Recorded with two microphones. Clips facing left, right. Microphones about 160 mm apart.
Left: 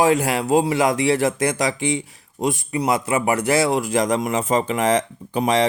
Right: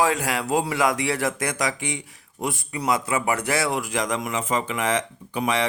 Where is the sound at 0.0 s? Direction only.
25° left (ahead or behind).